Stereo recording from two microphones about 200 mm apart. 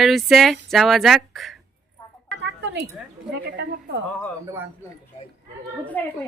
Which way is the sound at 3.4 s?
60° right (ahead or behind).